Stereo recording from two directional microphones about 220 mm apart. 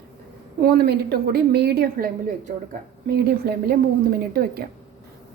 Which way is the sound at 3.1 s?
45° right (ahead or behind).